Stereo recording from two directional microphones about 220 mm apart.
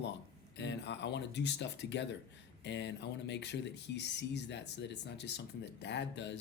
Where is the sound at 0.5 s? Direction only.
55° left (ahead or behind).